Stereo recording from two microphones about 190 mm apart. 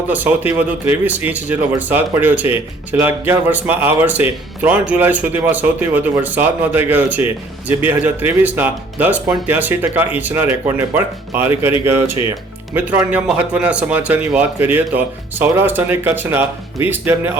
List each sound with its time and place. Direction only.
0.1 s speech: 10° right (ahead or behind)
12.7 s speech: 10° right (ahead or behind)